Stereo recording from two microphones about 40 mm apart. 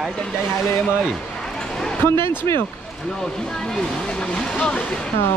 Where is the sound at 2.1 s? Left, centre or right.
Left.